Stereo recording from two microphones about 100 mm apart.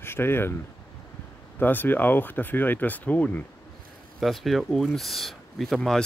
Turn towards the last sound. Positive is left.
turn(degrees=5)  # may be behind; listen again after turning